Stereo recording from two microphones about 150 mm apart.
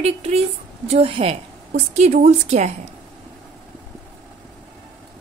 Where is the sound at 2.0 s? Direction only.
50° right (ahead or behind).